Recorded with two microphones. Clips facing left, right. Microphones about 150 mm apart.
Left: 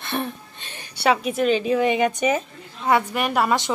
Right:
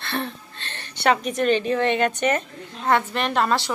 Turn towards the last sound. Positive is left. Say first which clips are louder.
# left 1 dB
turn(degrees=15)  # may be behind; listen again after turning